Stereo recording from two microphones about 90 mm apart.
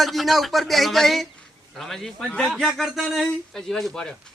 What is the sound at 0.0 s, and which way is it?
Speech, centre (ahead or behind).